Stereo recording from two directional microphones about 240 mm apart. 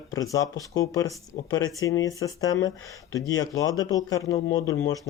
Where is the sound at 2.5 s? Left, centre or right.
Left.